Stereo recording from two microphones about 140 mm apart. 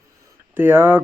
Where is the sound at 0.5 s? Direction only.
15° right (ahead or behind).